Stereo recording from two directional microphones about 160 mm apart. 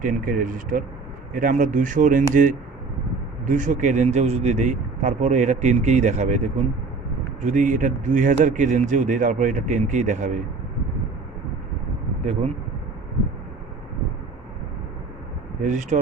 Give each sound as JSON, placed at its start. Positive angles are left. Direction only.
{"t": 0.0, "sound": "speech", "side_deg": -55}
{"t": 15.6, "sound": "speech", "side_deg": -50}